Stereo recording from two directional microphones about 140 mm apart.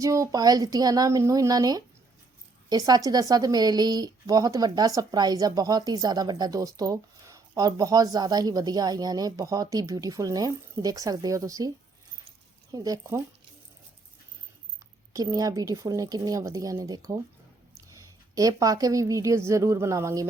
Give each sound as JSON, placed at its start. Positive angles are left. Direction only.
{"t": 0.0, "sound": "a woman's voice", "side_deg": -25}
{"t": 12.7, "sound": "a woman's voice", "side_deg": -25}
{"t": 15.1, "sound": "a woman's voice", "side_deg": -25}